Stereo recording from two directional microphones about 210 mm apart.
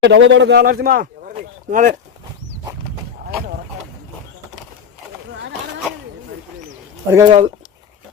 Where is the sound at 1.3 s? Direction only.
35° right (ahead or behind).